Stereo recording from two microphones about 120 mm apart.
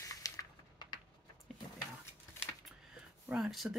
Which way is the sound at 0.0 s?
30° left (ahead or behind).